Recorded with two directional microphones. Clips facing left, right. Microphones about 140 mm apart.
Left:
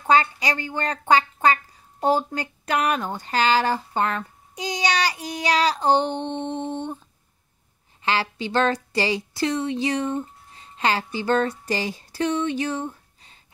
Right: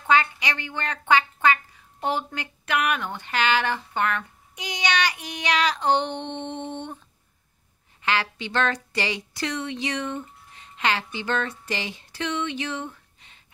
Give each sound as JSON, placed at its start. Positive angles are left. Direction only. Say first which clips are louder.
{"t": 0.0, "sound": "speech", "louder": "left 2 dB", "side_deg": 40}
{"t": 8.0, "sound": "speech", "louder": "left 2 dB", "side_deg": 30}